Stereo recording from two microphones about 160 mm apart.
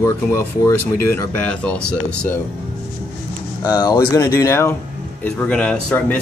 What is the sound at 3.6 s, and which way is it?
Speech, 25° left (ahead or behind).